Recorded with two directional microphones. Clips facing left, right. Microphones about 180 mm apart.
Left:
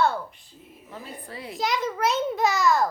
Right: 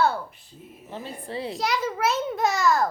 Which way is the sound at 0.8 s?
25° right (ahead or behind).